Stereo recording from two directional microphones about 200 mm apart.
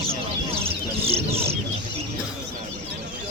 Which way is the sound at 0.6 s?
30° right (ahead or behind).